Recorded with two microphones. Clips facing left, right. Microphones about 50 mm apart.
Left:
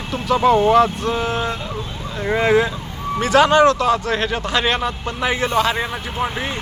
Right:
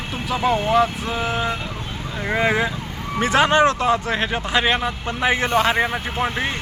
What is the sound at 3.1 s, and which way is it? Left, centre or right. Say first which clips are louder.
Speech: left 3 dB; right.